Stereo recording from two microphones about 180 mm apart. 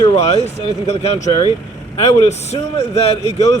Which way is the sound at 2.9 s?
35° left (ahead or behind).